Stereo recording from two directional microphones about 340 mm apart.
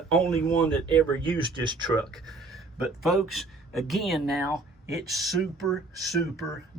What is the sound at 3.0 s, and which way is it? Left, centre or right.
Speech, centre.